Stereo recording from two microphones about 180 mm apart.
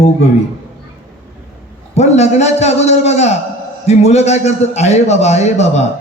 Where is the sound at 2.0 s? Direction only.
40° left (ahead or behind).